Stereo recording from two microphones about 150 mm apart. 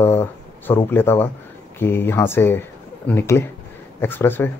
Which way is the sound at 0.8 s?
15° left (ahead or behind).